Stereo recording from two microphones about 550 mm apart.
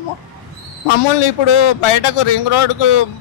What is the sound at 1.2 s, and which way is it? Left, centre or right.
Speech, left.